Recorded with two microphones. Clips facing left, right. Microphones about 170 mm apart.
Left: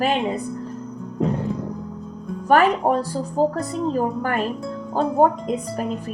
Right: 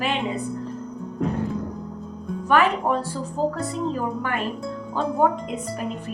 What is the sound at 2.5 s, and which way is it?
A woman's voice, 40° left (ahead or behind).